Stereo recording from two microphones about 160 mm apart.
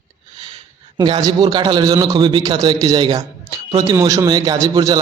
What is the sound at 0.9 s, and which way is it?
A man's voice, 25° right (ahead or behind).